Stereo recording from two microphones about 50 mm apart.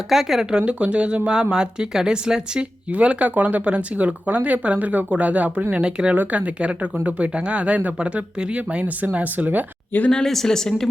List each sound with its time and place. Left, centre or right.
0.1 s speech: centre
0.5 s speech: right
10.1 s speech: centre